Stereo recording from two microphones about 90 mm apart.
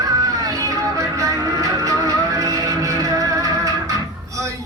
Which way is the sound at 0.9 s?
40° right (ahead or behind).